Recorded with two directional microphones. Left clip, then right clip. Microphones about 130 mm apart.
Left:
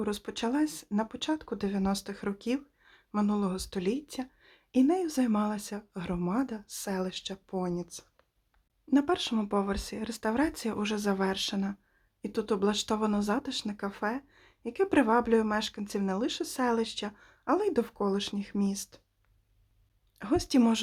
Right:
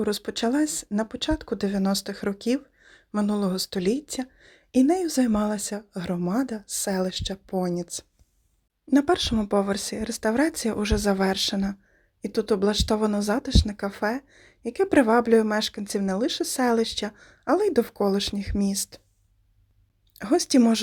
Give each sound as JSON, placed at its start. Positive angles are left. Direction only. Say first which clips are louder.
{"t": 0.0, "sound": "speech", "louder": "right 7 dB", "side_deg": -30}
{"t": 12.2, "sound": "speech", "louder": "right 6 dB", "side_deg": -25}
{"t": 20.1, "sound": "speech", "louder": "right 7 dB", "side_deg": -35}